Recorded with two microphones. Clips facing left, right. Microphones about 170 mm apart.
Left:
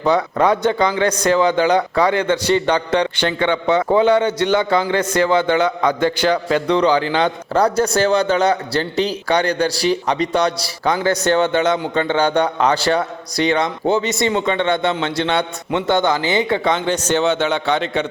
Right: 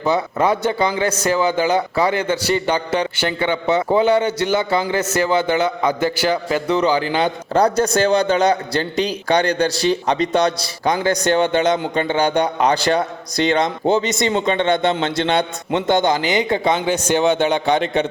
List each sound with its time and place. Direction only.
0.0 s a man's voice: 5° right (ahead or behind)